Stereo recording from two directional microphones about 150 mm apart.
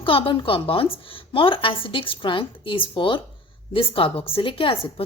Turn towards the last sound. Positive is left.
turn(degrees=35)  # may be behind; listen again after turning